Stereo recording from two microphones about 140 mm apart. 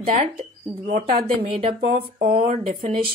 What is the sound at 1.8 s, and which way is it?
Speech, 50° right (ahead or behind).